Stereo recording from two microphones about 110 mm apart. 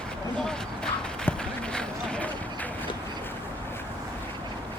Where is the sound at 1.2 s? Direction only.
10° left (ahead or behind).